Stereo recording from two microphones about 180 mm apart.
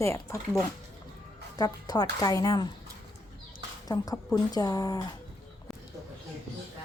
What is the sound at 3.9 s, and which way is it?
Speech, 20° left (ahead or behind).